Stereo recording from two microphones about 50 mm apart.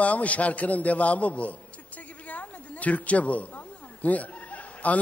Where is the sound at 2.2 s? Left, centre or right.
Left.